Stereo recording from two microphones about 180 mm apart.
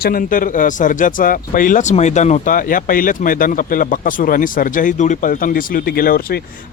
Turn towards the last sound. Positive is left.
turn(degrees=55)  # may be behind; listen again after turning